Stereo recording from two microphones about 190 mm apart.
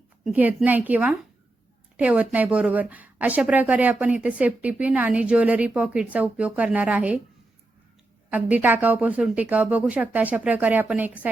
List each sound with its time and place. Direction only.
0.3 s speech: 10° right (ahead or behind)
8.3 s speech: 10° right (ahead or behind)